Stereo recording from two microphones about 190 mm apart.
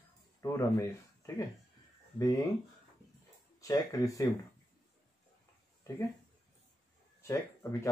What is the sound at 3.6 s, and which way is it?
Speech, 15° left (ahead or behind).